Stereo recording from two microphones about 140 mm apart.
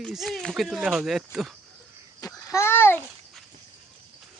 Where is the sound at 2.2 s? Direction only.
20° left (ahead or behind).